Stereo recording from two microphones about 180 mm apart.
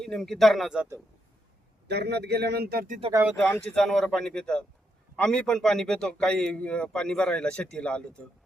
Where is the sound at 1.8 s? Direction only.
65° right (ahead or behind).